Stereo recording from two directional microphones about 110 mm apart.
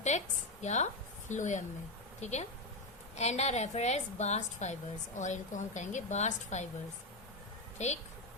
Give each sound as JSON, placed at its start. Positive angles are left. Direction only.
{"t": 0.1, "sound": "a woman's voice", "side_deg": 90}
{"t": 7.8, "sound": "a woman's voice", "side_deg": 90}